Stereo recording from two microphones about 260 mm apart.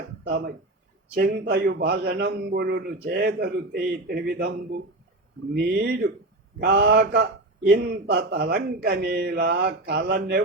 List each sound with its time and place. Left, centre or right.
0.3 s a man's voice: right
5.5 s a man's voice: right